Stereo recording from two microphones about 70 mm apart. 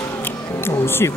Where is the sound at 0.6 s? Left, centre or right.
Left.